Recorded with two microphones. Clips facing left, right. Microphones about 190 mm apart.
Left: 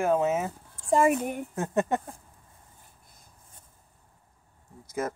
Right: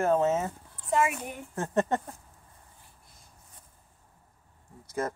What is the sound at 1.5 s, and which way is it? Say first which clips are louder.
Speech: right 1 dB; 10° left (ahead or behind).